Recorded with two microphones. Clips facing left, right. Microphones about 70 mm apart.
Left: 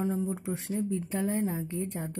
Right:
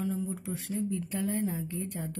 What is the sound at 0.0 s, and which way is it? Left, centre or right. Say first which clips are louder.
Speech: left 3 dB; left.